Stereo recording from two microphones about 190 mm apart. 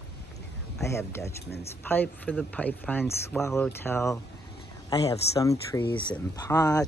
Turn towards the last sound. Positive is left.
turn(degrees=15)  # may be behind; listen again after turning